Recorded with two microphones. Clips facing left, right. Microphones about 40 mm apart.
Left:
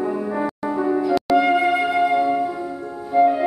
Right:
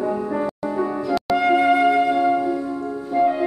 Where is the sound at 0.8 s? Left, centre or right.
Centre.